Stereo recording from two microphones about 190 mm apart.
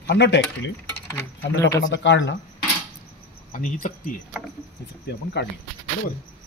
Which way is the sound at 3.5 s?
40° left (ahead or behind).